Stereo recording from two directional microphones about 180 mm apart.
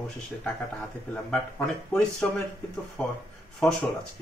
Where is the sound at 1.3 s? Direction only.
5° left (ahead or behind).